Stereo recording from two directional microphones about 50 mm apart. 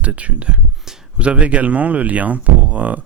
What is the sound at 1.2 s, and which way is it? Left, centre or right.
Speech, right.